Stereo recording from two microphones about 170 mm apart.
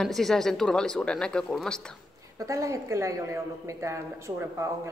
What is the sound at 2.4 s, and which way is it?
A woman's voice, 20° right (ahead or behind).